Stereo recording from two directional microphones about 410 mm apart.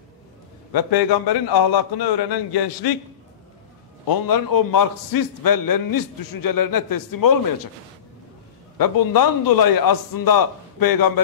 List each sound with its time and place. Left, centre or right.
0.7 s a man's voice: left
4.1 s a man's voice: left
8.7 s a man's voice: left